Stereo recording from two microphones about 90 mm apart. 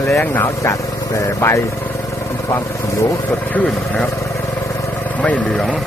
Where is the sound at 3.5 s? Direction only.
10° left (ahead or behind).